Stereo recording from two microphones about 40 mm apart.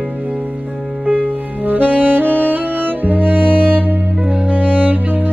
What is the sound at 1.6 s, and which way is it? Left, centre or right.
Saxophone, right.